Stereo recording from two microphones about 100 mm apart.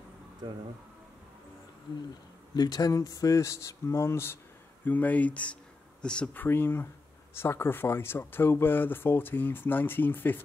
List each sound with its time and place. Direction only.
2.5 s speech: 45° left (ahead or behind); by 10.4 s 20° left (ahead or behind)